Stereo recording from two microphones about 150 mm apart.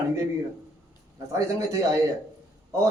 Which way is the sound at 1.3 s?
20° right (ahead or behind).